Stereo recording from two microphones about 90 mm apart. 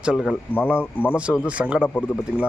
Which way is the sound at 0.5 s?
20° left (ahead or behind).